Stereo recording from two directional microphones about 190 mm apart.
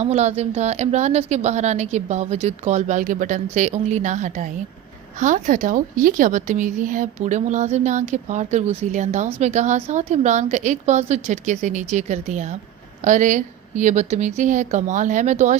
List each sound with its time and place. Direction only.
0.0 s a woman's voice: 35° right (ahead or behind)